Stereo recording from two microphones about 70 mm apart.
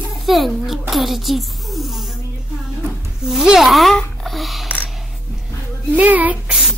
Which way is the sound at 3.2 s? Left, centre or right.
Centre.